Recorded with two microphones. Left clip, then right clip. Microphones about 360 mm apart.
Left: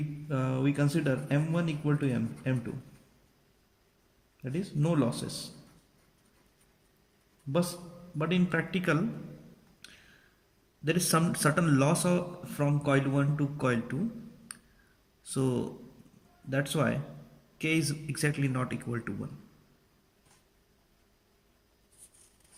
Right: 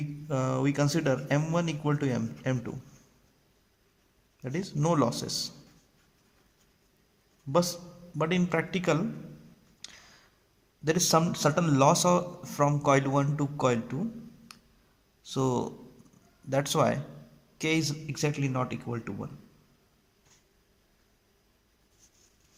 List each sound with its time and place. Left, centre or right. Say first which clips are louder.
0.3 s speech: right 3 dB; centre
4.4 s speech: right 4 dB; centre
7.5 s a man's voice: right 5 dB; centre
9.8 s a sound: right 5 dB; centre
10.8 s a man's voice: right 4 dB; centre
14.5 s clicking: left 3 dB; centre
15.2 s a man's voice: right 3 dB; centre